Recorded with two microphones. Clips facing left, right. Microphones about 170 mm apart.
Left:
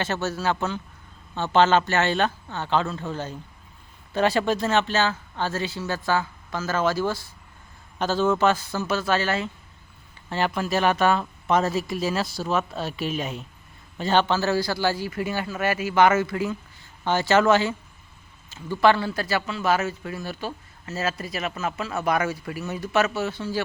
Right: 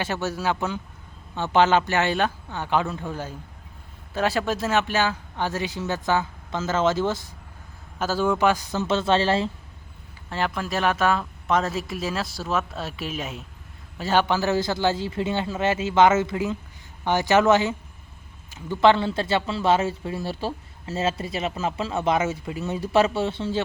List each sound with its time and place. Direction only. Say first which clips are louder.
0.0 s speech: even; 10° right (ahead or behind)
7.9 s speech: left 1 dB; 5° right (ahead or behind); by 9.5 s 30° right (ahead or behind)
10.2 s speech: left 2 dB; centre (ahead or behind); by 23.6 s 25° right (ahead or behind)